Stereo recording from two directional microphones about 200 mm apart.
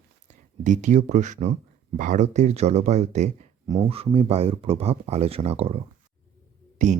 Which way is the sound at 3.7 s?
25° right (ahead or behind).